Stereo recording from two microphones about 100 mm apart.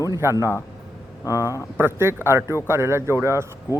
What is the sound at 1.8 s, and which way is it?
Speech, 25° right (ahead or behind).